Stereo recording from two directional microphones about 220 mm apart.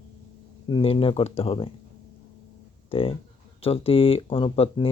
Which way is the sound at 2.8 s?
25° left (ahead or behind).